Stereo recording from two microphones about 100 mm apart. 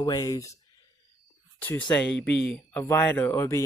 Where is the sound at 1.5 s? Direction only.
15° left (ahead or behind).